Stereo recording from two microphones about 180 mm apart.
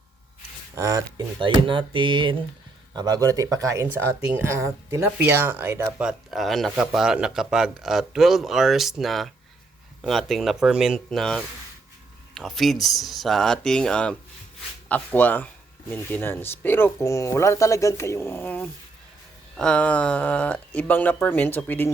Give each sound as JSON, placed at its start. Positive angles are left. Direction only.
{"t": 0.8, "sound": "speech", "side_deg": -20}